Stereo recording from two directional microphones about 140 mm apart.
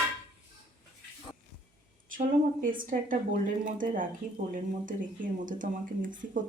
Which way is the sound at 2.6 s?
75° right (ahead or behind).